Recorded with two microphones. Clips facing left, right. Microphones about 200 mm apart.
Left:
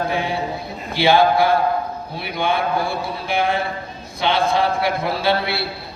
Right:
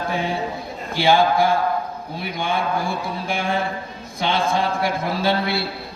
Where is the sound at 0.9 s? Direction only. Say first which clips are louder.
Left 2 dB; 45° right (ahead or behind).